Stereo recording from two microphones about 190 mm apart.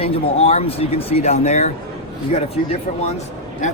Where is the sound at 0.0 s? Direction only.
30° left (ahead or behind).